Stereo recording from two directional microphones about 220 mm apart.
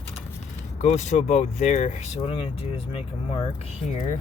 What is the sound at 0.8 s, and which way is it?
Speech, 35° left (ahead or behind).